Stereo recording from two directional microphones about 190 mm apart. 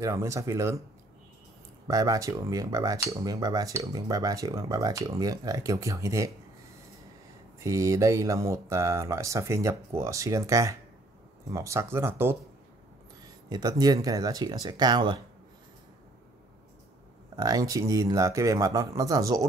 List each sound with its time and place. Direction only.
0.0 s speech: 15° right (ahead or behind)
1.9 s speech: 20° right (ahead or behind)
7.6 s speech: 15° right (ahead or behind)
13.5 s speech: 20° right (ahead or behind)
17.4 s speech: 20° right (ahead or behind)